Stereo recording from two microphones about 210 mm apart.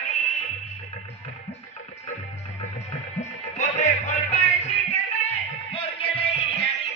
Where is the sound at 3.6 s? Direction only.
35° left (ahead or behind).